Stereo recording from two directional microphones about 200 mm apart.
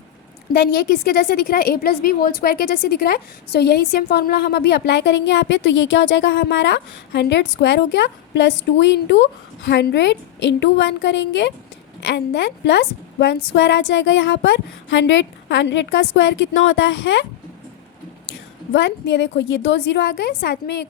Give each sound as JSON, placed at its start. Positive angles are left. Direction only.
{"t": 0.5, "sound": "a woman's voice", "side_deg": 50}
{"t": 18.3, "sound": "a woman's voice", "side_deg": 65}